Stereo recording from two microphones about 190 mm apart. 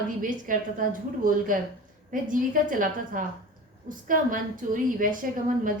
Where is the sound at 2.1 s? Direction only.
45° right (ahead or behind).